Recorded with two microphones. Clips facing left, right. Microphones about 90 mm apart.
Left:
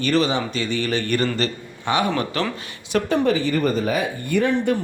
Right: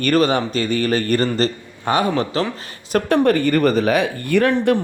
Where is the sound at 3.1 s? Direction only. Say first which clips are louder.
Right 5 dB; 55° right (ahead or behind); by 4.8 s 75° right (ahead or behind).